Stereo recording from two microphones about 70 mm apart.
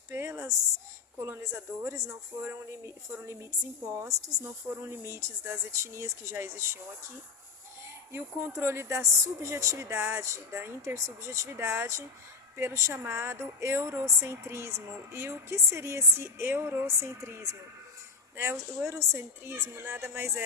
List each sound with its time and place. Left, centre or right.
0.1 s a sound: right
1.2 s speech: right
4.4 s speech: right
8.1 s speech: right